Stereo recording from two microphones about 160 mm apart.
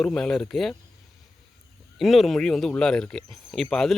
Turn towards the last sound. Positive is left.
turn(degrees=5)  # may be behind; listen again after turning